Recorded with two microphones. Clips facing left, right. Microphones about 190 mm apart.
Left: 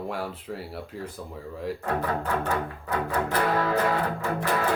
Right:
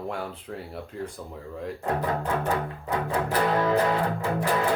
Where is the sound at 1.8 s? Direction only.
20° right (ahead or behind).